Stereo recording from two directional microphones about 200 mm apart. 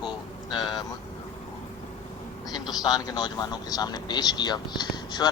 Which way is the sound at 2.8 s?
20° left (ahead or behind).